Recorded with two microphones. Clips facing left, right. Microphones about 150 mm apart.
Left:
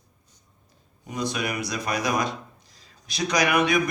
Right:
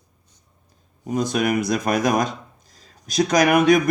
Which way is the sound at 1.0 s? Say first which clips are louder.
Right 7 dB; 45° right (ahead or behind).